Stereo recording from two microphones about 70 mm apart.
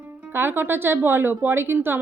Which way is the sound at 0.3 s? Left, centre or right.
Right.